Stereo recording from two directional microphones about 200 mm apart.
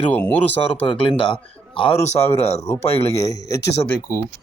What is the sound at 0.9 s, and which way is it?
A man's voice, 25° left (ahead or behind).